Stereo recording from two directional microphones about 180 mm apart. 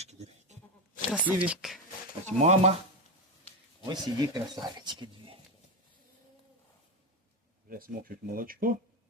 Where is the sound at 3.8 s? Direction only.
20° right (ahead or behind).